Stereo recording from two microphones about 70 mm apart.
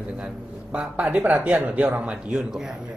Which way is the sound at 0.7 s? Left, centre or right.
Centre.